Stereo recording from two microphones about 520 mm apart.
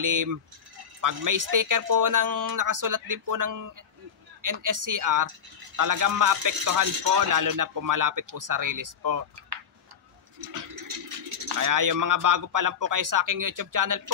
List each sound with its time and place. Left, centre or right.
0.0 s speech: right
10.5 s speech: right